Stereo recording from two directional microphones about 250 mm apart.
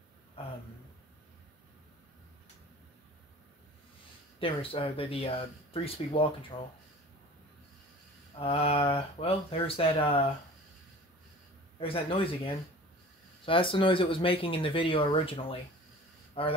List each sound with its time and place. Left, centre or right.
4.4 s speech: left
8.4 s speech: left
11.8 s speech: left